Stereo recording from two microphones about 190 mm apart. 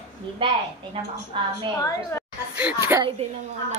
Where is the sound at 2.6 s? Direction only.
10° right (ahead or behind).